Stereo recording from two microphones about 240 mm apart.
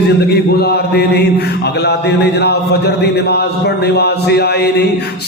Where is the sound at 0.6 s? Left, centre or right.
Left.